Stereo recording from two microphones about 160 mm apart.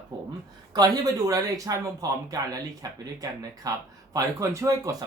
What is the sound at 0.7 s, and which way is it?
Speech, 25° right (ahead or behind).